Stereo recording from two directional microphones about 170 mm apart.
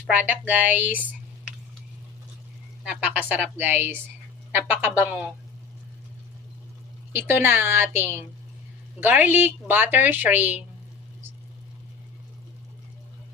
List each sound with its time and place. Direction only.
0.3 s speech: 10° right (ahead or behind)
3.0 s speech: 10° right (ahead or behind)
7.1 s speech: 10° right (ahead or behind)